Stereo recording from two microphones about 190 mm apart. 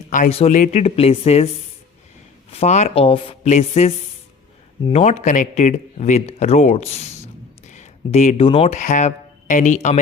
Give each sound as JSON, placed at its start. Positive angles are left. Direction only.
{"t": 0.1, "sound": "speech", "side_deg": 35}
{"t": 2.5, "sound": "speech", "side_deg": 35}